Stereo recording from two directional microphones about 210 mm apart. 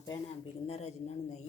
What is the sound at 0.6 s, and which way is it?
Speech, 30° left (ahead or behind).